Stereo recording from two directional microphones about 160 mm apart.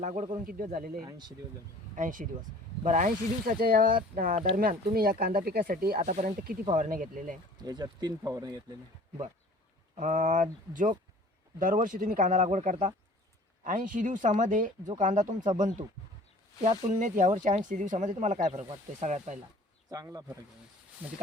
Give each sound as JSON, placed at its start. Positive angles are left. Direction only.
{"t": 0.0, "sound": "speech", "side_deg": -50}
{"t": 1.0, "sound": "speech", "side_deg": -25}
{"t": 2.0, "sound": "speech", "side_deg": -55}
{"t": 7.6, "sound": "speech", "side_deg": -25}
{"t": 10.0, "sound": "speech", "side_deg": -50}
{"t": 19.9, "sound": "speech", "side_deg": -20}
{"t": 21.0, "sound": "speech", "side_deg": -10}